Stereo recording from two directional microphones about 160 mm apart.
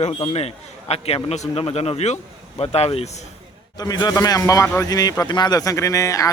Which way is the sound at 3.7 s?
25° left (ahead or behind).